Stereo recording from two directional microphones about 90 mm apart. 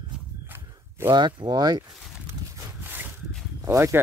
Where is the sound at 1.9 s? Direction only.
5° right (ahead or behind).